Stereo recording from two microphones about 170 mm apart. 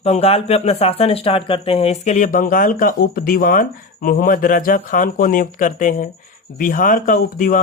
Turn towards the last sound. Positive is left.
turn(degrees=55)  # may be behind; listen again after turning